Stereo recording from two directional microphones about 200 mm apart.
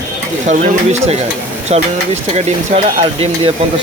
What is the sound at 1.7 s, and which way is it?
Speech, 35° right (ahead or behind).